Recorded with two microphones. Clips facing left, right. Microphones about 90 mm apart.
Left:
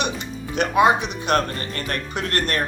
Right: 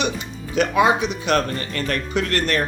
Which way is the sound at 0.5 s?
50° left (ahead or behind).